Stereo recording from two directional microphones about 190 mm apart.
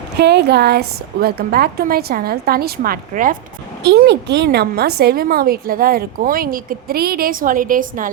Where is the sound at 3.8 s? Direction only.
60° right (ahead or behind).